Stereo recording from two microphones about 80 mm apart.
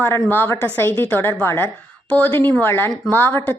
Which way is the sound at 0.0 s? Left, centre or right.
Left.